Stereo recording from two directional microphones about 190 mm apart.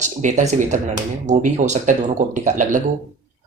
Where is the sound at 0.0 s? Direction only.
40° right (ahead or behind).